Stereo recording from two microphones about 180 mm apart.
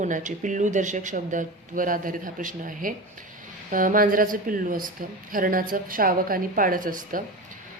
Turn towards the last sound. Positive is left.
turn(degrees=-50)  # may be behind; listen again after turning